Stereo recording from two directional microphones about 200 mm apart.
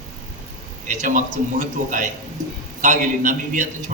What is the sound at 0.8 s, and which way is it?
A man's voice, 40° right (ahead or behind).